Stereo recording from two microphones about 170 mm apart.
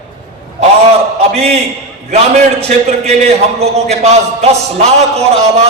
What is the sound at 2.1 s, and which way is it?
Music, 40° right (ahead or behind).